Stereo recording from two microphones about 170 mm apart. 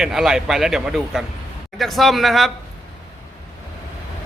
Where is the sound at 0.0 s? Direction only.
Centre (ahead or behind).